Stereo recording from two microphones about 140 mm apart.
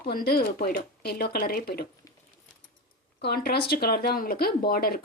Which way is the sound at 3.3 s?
90° left.